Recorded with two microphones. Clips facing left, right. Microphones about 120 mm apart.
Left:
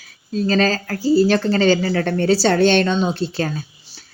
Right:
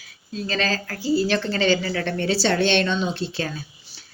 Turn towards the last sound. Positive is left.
turn(degrees=40)  # may be behind; listen again after turning